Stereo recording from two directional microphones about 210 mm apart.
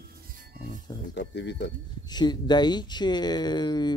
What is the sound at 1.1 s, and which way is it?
Speech, 55° left (ahead or behind).